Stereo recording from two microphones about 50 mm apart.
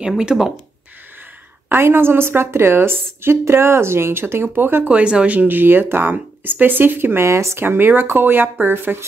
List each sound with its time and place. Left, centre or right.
0.3 s speech: centre
1.7 s a woman's voice: right
4.8 s speech: right
7.2 s speech: right
7.6 s a woman's voice: right